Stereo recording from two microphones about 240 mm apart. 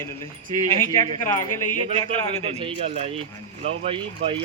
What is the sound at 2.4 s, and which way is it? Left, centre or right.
Speech, right.